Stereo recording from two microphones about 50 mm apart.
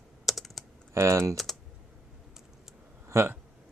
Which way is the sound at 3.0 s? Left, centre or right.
Right.